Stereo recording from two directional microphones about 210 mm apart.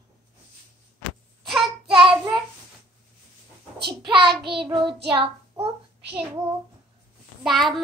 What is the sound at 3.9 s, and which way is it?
Child singing, 25° right (ahead or behind).